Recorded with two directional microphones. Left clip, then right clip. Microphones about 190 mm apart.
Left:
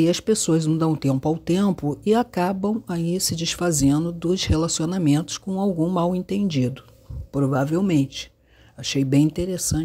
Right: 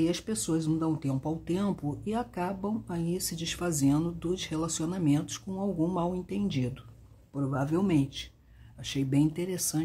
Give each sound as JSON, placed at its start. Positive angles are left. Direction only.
{"t": 0.0, "sound": "speech", "side_deg": 40}
{"t": 5.9, "sound": "speech", "side_deg": 40}